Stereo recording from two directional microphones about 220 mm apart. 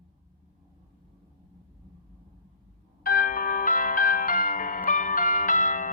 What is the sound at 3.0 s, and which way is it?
Music, 40° left (ahead or behind).